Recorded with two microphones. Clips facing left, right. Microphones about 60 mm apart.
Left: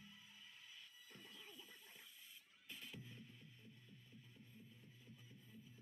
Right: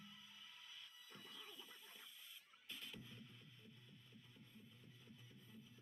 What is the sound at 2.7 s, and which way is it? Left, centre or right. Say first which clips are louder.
Music: even; centre.